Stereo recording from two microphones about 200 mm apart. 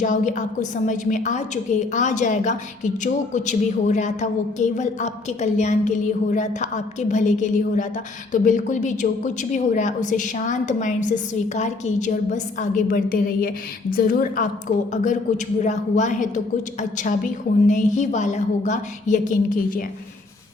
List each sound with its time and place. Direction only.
0.0 s a woman's voice: 40° left (ahead or behind)
17.7 s a woman's voice: 40° left (ahead or behind)